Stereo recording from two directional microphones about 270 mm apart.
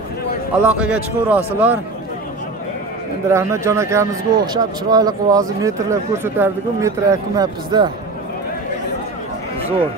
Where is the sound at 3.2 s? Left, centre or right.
Centre.